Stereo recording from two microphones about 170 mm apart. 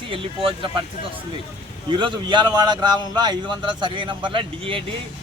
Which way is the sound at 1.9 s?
30° right (ahead or behind).